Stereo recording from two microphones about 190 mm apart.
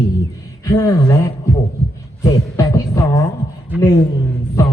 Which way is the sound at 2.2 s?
15° left (ahead or behind).